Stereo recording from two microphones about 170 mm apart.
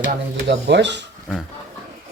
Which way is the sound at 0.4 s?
85° right.